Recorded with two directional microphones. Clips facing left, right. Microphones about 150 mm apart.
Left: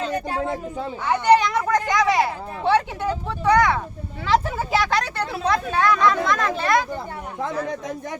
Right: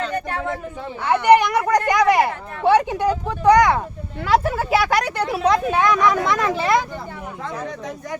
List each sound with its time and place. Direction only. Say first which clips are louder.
1.4 s speech: right 3 dB; 15° right (ahead or behind)